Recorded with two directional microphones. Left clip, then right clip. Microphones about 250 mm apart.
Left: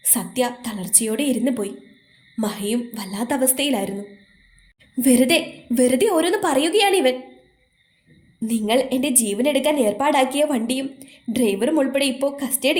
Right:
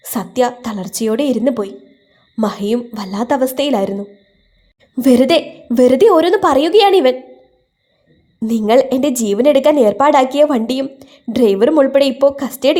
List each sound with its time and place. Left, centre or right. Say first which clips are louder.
0.0 s a woman's voice: right 7 dB; right
8.4 s a woman's voice: right 8 dB; right